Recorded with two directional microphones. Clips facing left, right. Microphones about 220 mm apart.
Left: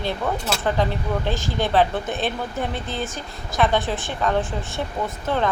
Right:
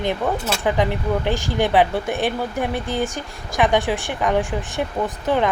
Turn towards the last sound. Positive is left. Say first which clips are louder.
# right 3 dB
turn(degrees=-15)  # may be behind; listen again after turning